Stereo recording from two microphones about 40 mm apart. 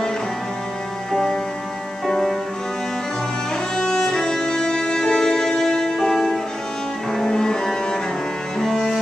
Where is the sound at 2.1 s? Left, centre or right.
Centre.